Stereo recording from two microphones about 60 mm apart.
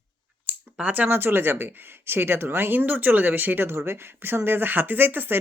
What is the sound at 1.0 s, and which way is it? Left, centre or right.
Speech, right.